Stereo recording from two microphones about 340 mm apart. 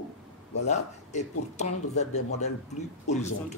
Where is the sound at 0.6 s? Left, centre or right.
Centre.